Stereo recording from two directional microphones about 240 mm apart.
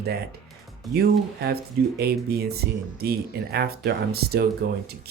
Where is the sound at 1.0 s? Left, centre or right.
Right.